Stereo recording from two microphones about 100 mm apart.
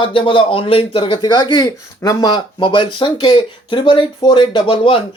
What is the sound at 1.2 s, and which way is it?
Speech, 50° left (ahead or behind).